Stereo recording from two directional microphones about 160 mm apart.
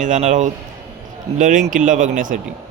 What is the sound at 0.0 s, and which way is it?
A man's voice, 50° right (ahead or behind).